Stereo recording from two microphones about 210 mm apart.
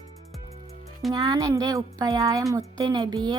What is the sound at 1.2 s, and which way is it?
A woman's voice, 15° right (ahead or behind).